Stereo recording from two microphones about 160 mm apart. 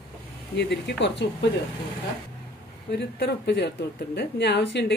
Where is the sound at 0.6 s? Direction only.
90° left.